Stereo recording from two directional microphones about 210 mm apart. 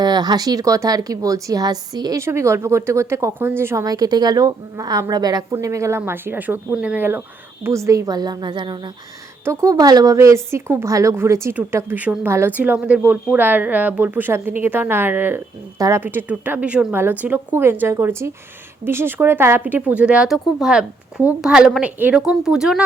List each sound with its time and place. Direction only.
0.0 s a woman's voice: 20° right (ahead or behind); by 22.8 s centre (ahead or behind)